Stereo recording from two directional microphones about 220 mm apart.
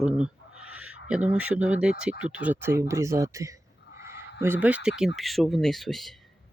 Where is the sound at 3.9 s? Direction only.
50° left (ahead or behind).